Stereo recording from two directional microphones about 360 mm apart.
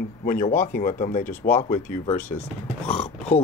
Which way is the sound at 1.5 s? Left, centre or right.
Centre.